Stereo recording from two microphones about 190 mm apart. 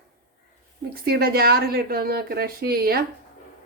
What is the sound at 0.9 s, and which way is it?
A woman's voice, 55° right (ahead or behind).